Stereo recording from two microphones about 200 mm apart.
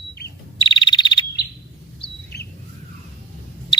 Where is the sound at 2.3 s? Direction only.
55° left (ahead or behind).